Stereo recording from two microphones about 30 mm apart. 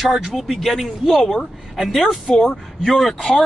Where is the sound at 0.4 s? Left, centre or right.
Centre.